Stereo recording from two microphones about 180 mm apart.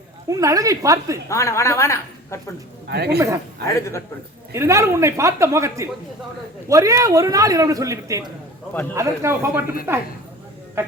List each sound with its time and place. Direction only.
0.3 s a man's voice: 20° right (ahead or behind)
1.3 s a woman's voice: 15° left (ahead or behind)
2.9 s a man's voice: 65° right (ahead or behind)
3.8 s a woman's voice: 15° left (ahead or behind)
4.5 s a man's voice: 15° right (ahead or behind)
10.8 s a sound: 15° right (ahead or behind)